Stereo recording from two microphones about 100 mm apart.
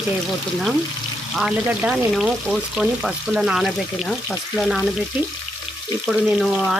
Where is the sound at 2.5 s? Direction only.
5° right (ahead or behind).